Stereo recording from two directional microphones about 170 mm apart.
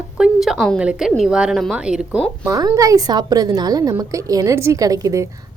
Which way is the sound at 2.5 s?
20° right (ahead or behind).